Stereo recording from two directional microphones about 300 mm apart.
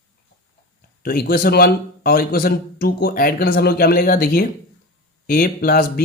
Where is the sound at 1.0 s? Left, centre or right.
Left.